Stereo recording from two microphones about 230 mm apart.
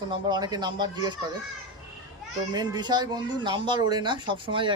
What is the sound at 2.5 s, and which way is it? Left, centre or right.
Speech, centre.